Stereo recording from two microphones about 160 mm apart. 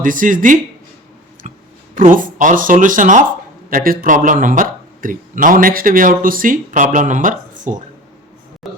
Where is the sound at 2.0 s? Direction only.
55° right (ahead or behind).